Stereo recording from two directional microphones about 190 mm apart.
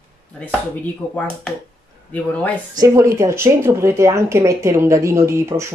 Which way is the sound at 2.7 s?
15° right (ahead or behind).